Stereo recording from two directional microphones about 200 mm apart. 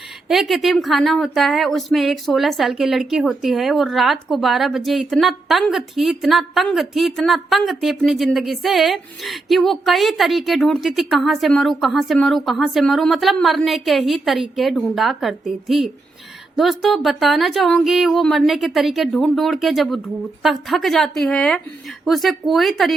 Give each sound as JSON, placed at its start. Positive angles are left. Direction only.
{"t": 0.3, "sound": "speech", "side_deg": 0}